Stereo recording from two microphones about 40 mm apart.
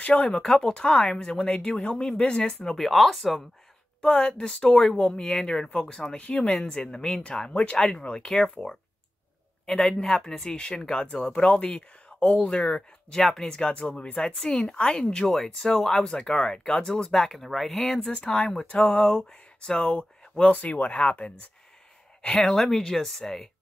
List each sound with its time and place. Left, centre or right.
0.0 s speech: left
0.4 s speech: centre
2.9 s speech: centre
4.0 s a woman's voice: centre
5.2 s speech: centre
12.5 s speech: left
13.1 s speech: centre
18.1 s speech: left
22.4 s speech: centre